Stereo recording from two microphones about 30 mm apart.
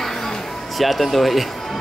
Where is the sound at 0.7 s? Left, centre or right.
Centre.